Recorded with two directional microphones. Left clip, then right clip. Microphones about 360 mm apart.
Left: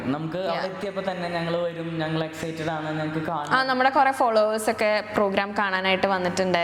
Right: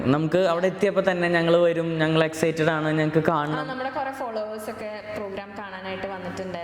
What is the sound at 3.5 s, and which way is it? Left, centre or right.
A woman's voice, left.